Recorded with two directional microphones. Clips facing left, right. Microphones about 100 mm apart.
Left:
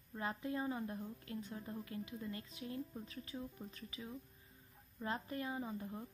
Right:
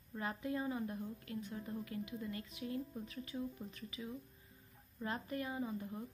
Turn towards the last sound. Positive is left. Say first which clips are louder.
# right 2 dB
turn(degrees=20)  # may be behind; listen again after turning